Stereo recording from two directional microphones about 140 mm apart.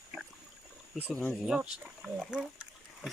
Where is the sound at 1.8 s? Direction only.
5° right (ahead or behind).